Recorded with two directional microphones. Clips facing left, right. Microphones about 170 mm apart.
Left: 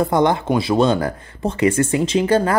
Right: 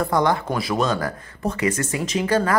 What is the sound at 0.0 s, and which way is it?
Speech, 25° left (ahead or behind).